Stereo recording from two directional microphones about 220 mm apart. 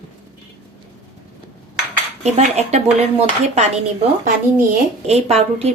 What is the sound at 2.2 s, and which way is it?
A woman's voice, 30° right (ahead or behind).